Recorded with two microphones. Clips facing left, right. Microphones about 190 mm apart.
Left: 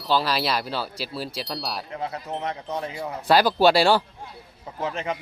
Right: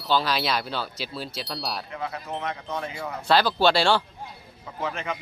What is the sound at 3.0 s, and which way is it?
Speech, 15° left (ahead or behind).